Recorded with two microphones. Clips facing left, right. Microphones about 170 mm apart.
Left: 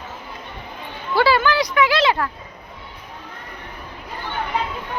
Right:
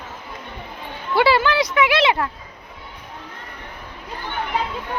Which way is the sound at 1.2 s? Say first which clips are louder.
Even; 25° right (ahead or behind).